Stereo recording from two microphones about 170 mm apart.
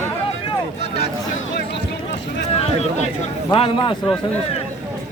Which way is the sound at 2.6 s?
40° left (ahead or behind).